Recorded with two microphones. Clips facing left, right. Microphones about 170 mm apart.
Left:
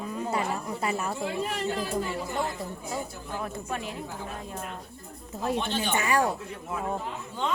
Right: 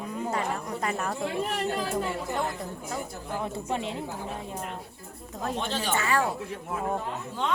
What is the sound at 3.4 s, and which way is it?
Speech, 25° right (ahead or behind).